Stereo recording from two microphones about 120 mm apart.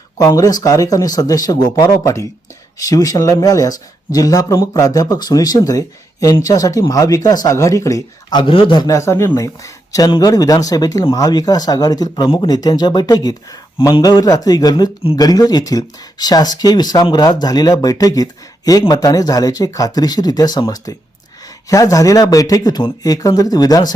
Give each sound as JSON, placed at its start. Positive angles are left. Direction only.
{"t": 0.2, "sound": "speech", "side_deg": 30}
{"t": 9.0, "sound": "speech", "side_deg": 25}